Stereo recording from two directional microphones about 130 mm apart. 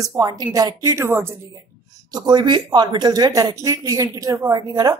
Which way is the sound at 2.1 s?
35° right (ahead or behind).